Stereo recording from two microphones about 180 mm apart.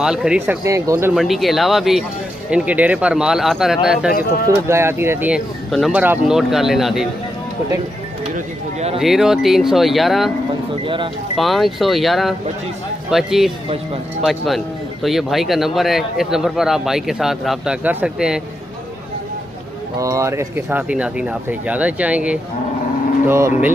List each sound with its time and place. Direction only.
0.0 s speech: 5° right (ahead or behind)
0.7 s speech: 15° right (ahead or behind)
1.1 s speech: centre (ahead or behind)
4.5 s speech: 15° right (ahead or behind)
9.0 s speech: centre (ahead or behind)
11.3 s speech: centre (ahead or behind)
20.0 s speech: 15° right (ahead or behind)